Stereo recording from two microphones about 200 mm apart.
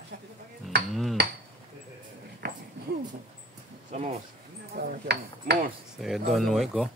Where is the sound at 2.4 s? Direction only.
55° right (ahead or behind).